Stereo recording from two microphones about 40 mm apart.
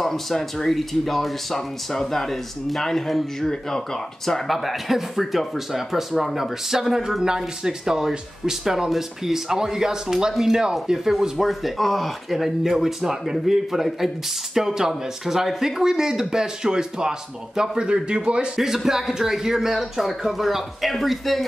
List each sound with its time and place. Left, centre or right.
0.0 s speech: centre
4.5 s a man's voice: centre; by 18.5 s right
18.6 s speech: centre